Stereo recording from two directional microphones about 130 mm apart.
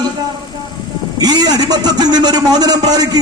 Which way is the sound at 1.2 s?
30° right (ahead or behind).